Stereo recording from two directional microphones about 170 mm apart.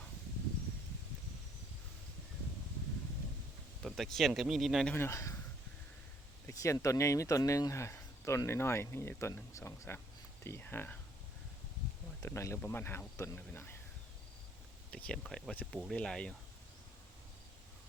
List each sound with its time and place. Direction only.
3.8 s speech: centre (ahead or behind)
4.9 s speech: 15° left (ahead or behind)
6.5 s speech: 20° left (ahead or behind)
12.2 s speech: 15° left (ahead or behind)
14.8 s speech: 5° left (ahead or behind)